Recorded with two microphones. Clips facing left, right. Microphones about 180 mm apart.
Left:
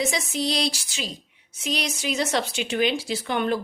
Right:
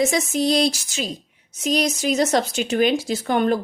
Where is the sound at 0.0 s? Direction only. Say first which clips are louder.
Right 6 dB; 45° right (ahead or behind).